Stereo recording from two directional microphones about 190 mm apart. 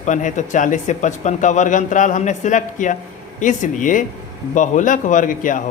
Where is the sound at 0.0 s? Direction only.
40° left (ahead or behind).